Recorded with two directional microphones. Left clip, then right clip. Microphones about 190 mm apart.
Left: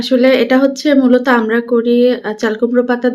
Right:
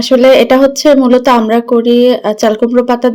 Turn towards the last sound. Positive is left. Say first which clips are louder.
# right 4 dB
turn(degrees=-30)  # may be behind; listen again after turning